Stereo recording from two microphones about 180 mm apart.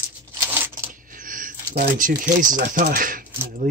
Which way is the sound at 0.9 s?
50° right (ahead or behind).